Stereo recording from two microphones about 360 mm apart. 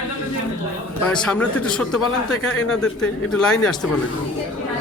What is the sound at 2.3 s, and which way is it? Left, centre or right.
Speech, left.